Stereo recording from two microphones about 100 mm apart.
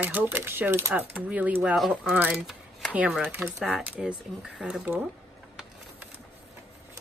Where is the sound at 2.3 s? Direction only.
5° right (ahead or behind).